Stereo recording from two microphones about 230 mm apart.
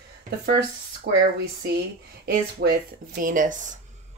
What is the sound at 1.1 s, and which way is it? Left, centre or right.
Speech, right.